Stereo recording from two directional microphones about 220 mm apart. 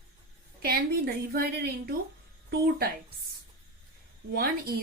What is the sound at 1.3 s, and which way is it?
Speech, 45° right (ahead or behind).